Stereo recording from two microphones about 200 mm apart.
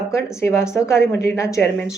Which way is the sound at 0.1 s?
15° left (ahead or behind).